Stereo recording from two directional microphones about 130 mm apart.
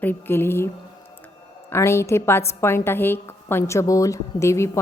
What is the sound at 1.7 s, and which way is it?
A woman's voice, 20° left (ahead or behind).